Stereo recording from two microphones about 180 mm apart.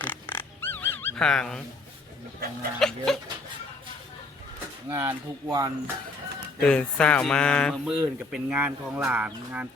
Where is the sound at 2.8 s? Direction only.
Centre (ahead or behind).